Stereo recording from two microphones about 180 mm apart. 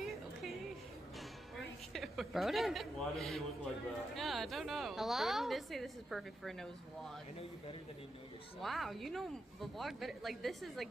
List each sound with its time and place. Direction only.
0.0 s music: centre (ahead or behind)
2.0 s a man's voice: centre (ahead or behind)
8.5 s a woman's voice: centre (ahead or behind)